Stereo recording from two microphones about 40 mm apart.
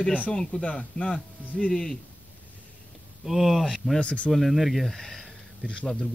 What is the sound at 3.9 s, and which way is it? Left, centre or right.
Speech, left.